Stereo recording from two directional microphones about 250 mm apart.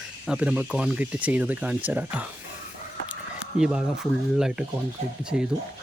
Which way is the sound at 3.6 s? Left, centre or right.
Centre.